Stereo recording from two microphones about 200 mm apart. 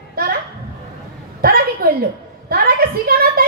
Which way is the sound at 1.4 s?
50° right (ahead or behind).